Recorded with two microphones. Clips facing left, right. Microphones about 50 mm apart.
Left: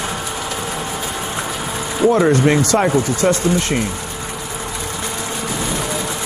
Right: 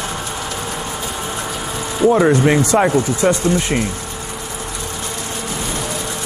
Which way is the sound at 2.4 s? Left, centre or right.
Centre.